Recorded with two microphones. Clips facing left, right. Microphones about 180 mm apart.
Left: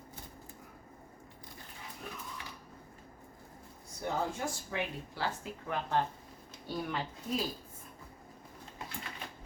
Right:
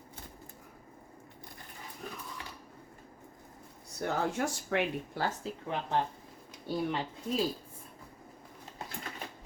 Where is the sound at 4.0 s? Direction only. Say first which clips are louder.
Right 3 dB; 75° right (ahead or behind).